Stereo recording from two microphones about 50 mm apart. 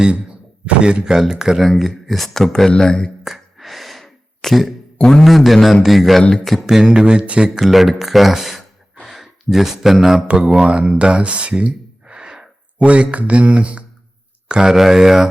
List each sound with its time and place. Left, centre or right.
0.6 s speech: right
1.6 s speech: centre
3.2 s gasp: centre
4.9 s a man's voice: centre
5.2 s speech: centre
6.7 s speech: centre
7.6 s speech: centre
9.0 s gasp: centre
10.2 s speech: centre